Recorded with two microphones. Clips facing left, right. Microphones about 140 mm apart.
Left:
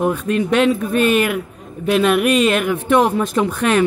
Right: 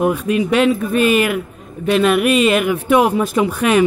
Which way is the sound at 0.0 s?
10° right (ahead or behind).